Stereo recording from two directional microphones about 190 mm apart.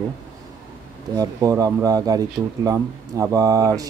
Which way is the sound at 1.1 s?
20° right (ahead or behind).